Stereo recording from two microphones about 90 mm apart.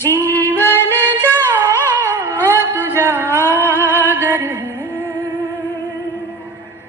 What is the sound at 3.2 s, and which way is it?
Music, 25° left (ahead or behind).